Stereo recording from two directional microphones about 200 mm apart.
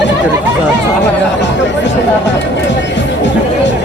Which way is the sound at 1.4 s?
60° left (ahead or behind).